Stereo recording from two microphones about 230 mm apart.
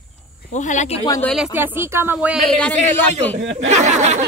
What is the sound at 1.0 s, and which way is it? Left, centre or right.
Speech, centre.